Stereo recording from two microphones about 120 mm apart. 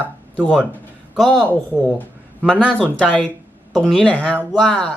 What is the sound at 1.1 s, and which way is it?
Speech, centre (ahead or behind).